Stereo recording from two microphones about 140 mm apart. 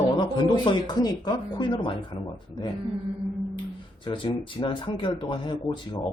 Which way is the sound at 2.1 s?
45° left (ahead or behind).